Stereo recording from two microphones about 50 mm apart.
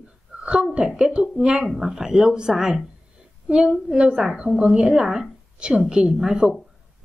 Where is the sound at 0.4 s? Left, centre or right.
Centre.